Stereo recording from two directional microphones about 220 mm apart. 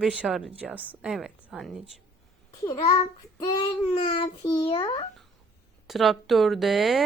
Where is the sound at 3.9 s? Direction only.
25° left (ahead or behind).